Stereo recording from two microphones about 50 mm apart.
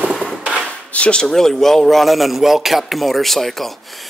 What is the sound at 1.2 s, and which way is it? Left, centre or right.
A man's voice, centre.